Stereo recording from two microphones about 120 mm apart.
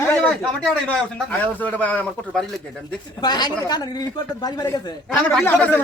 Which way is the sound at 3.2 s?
35° left (ahead or behind).